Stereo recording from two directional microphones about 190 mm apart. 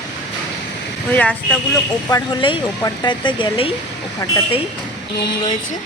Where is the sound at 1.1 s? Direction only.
10° left (ahead or behind).